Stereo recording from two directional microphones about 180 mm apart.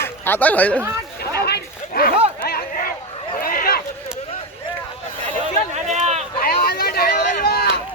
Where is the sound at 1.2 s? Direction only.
60° left (ahead or behind).